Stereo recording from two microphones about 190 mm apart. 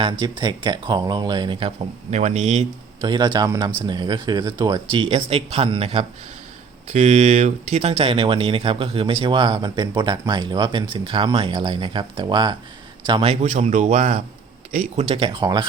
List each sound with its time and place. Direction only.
0.0 s speech: 25° right (ahead or behind)
3.0 s speech: 25° right (ahead or behind)